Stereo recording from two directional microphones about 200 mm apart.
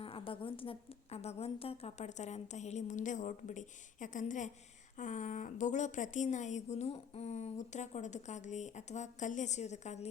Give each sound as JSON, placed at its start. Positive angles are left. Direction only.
{"t": 0.0, "sound": "a woman's voice", "side_deg": 25}